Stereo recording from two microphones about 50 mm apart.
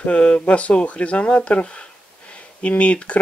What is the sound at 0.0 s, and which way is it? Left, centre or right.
Speech, left.